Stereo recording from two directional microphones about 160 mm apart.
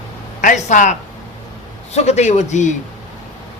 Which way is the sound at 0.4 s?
55° left (ahead or behind).